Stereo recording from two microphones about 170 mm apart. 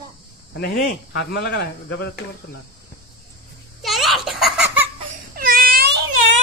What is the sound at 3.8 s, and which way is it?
Giggle, centre (ahead or behind).